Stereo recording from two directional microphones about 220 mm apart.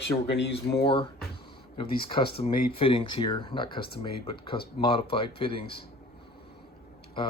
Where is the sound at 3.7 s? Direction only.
45° left (ahead or behind).